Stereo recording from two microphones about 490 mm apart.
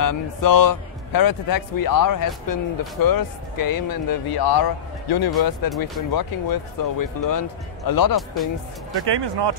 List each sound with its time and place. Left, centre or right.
0.0 s speech: left
8.9 s speech: right